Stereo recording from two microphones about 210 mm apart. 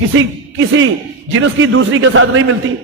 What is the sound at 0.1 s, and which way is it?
A man's voice, 70° right (ahead or behind).